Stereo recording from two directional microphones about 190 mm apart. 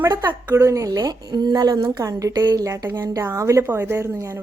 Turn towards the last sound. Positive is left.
turn(degrees=-15)  # may be behind; listen again after turning